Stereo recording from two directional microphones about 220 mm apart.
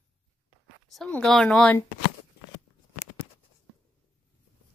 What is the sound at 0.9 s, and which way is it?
Speech, 5° left (ahead or behind).